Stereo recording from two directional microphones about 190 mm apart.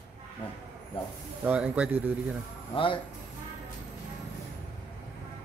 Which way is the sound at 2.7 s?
25° left (ahead or behind).